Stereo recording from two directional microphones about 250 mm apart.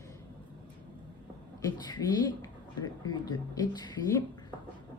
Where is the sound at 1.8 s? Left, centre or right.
Centre.